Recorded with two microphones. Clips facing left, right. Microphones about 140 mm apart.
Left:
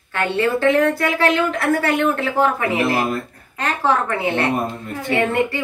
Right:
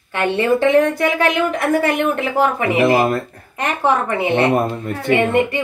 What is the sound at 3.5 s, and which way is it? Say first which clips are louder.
Speech: right 2 dB; 15° right (ahead or behind).